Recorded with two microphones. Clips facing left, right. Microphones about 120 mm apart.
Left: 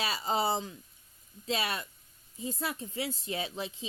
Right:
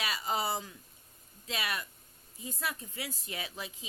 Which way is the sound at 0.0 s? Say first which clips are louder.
Left 3 dB; 30° left (ahead or behind).